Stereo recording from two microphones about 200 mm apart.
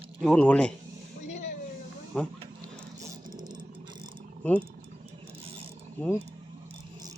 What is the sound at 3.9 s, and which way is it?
Mechanisms, 20° right (ahead or behind).